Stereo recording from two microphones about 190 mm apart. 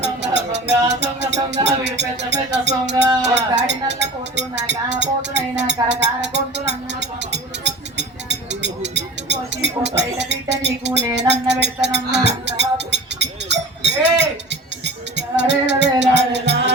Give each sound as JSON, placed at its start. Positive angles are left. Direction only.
{"t": 0.0, "sound": "music", "side_deg": -65}
{"t": 0.9, "sound": "speech", "side_deg": -65}
{"t": 5.9, "sound": "a sound", "side_deg": -65}
{"t": 11.3, "sound": "music", "side_deg": -65}